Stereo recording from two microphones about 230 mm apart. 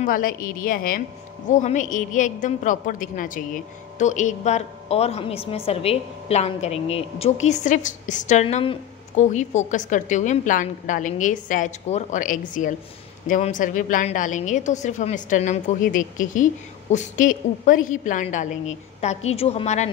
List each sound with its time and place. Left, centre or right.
0.0 s a woman's voice: left